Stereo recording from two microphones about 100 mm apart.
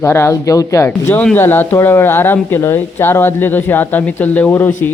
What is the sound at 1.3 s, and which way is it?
A man's voice, 20° left (ahead or behind).